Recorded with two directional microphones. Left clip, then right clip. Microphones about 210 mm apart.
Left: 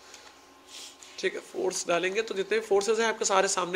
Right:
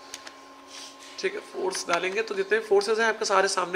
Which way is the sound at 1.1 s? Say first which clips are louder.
Right 1 dB; 35° left (ahead or behind).